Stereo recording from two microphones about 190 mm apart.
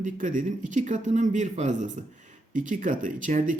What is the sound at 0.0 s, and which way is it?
A man's voice, 40° right (ahead or behind).